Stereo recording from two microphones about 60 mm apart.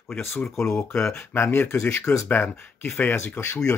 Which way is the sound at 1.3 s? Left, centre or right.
Left.